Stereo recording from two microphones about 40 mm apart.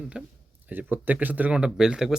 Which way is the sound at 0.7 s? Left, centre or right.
Right.